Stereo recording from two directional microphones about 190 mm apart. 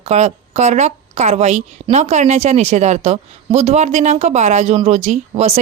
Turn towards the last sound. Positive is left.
turn(degrees=-35)  # may be behind; listen again after turning